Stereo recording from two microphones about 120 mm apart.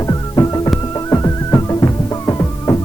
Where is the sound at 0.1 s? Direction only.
30° left (ahead or behind).